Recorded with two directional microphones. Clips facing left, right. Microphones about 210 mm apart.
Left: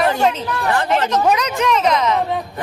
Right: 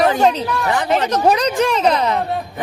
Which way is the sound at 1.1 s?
35° right (ahead or behind).